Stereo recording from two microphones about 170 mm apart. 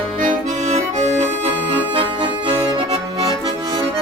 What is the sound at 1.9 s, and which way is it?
Accordion, 30° right (ahead or behind).